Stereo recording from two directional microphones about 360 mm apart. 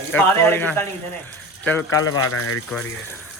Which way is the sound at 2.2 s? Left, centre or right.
Left.